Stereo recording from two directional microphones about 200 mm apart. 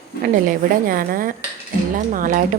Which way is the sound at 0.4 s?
45° right (ahead or behind).